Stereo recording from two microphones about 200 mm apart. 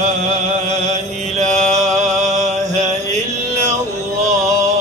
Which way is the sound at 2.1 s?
35° right (ahead or behind).